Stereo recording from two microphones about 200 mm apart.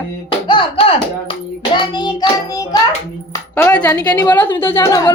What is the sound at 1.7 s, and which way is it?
Speech, 25° left (ahead or behind).